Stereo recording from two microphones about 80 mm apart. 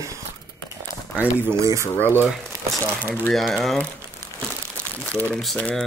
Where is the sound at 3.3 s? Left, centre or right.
Centre.